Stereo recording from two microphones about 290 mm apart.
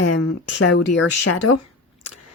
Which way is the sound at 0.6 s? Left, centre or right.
Left.